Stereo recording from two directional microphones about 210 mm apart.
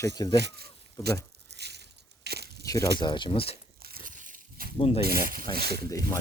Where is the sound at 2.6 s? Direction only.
15° left (ahead or behind).